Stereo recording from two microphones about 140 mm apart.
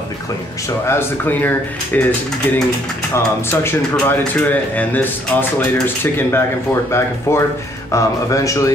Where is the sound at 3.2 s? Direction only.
15° left (ahead or behind).